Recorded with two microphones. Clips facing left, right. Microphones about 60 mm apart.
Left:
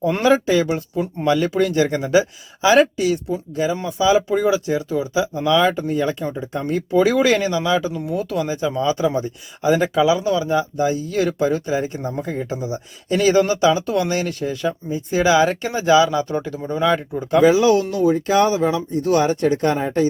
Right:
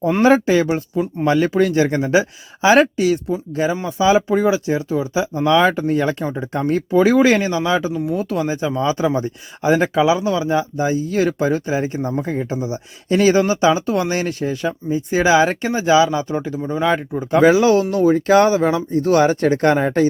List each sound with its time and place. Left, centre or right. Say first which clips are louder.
0.2 s speech: right 3 dB; right
6.2 s speech: right 3 dB; right
6.9 s speech: right 2 dB; right
11.1 s speech: right 1 dB; right; by 16.8 s centre
17.3 s speech: right 1 dB; right
17.9 s speech: right 3 dB; right